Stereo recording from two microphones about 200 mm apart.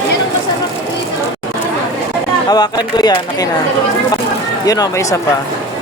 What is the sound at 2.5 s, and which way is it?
Speech, 20° left (ahead or behind).